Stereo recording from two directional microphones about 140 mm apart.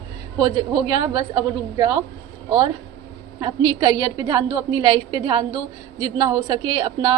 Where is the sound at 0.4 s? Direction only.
30° right (ahead or behind).